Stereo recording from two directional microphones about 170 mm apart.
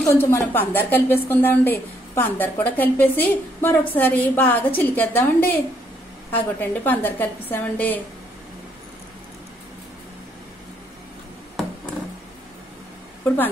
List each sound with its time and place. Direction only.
0.1 s a woman's voice: 15° left (ahead or behind)